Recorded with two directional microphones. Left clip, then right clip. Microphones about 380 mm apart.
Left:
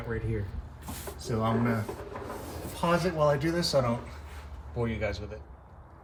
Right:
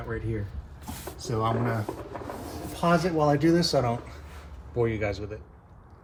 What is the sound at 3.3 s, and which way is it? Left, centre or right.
Speech, centre.